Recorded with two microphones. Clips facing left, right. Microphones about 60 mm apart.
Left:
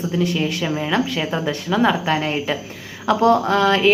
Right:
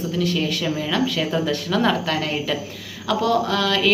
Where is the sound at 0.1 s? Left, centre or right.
Left.